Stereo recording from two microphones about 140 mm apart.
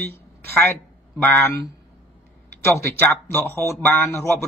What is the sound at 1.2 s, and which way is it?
Speech, 15° left (ahead or behind).